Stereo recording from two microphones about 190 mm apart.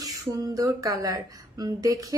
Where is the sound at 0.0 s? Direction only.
20° right (ahead or behind).